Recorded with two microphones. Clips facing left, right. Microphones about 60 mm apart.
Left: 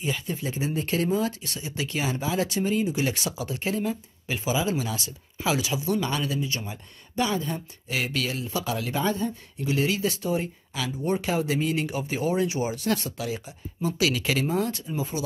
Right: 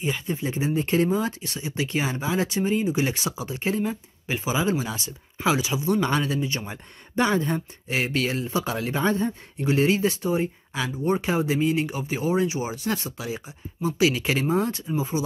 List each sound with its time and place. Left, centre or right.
0.0 s speech: right